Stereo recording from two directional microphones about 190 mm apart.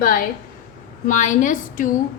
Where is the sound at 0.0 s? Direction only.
50° left (ahead or behind).